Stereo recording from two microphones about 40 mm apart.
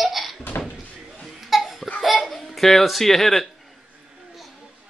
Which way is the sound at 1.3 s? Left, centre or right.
Centre.